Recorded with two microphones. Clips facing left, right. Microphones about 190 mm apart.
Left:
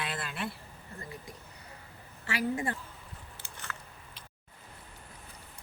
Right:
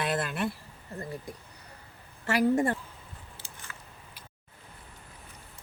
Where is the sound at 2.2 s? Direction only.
45° right (ahead or behind).